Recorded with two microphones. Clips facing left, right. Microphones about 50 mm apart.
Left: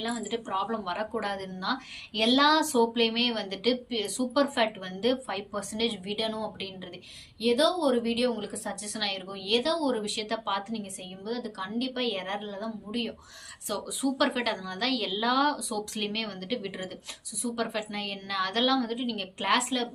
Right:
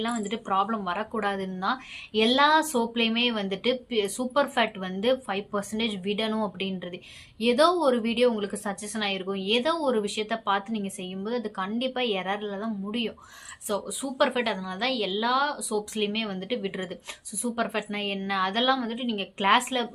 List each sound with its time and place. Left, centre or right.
0.0 s a woman's voice: right
10.7 s a woman's voice: right; by 15.8 s centre
16.0 s a woman's voice: centre